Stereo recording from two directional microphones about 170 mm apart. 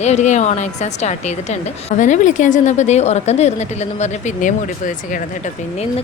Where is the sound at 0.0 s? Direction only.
40° left (ahead or behind).